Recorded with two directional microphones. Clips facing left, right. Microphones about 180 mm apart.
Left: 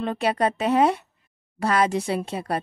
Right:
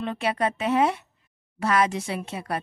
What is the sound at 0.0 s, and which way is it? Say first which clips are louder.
A woman's voice: left 3 dB; 40° left (ahead or behind).